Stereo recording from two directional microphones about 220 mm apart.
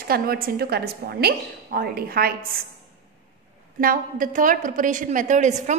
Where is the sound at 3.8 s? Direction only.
40° right (ahead or behind).